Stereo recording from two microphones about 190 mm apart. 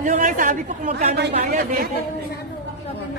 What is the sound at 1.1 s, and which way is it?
Speech, 65° right (ahead or behind).